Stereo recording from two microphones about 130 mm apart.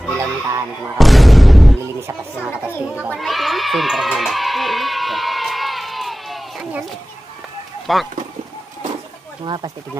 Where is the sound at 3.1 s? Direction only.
Centre (ahead or behind).